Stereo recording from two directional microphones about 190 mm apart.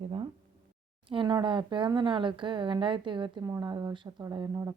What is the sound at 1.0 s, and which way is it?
Speech, 25° right (ahead or behind).